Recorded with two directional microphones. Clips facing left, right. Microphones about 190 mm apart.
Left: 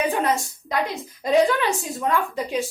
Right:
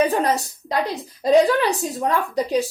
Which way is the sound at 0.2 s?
35° right (ahead or behind).